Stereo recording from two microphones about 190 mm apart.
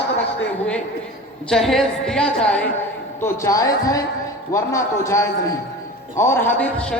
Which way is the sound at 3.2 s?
15° left (ahead or behind).